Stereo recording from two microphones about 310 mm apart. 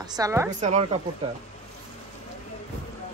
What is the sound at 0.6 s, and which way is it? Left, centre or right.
Speech, right.